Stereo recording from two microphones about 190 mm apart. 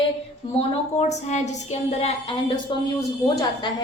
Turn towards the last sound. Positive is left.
turn(degrees=20)  # may be behind; listen again after turning